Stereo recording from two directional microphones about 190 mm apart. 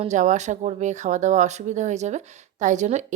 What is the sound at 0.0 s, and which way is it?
A woman's voice, 40° right (ahead or behind).